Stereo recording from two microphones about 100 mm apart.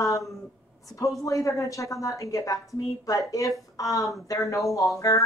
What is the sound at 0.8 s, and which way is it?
A woman's voice, 35° left (ahead or behind).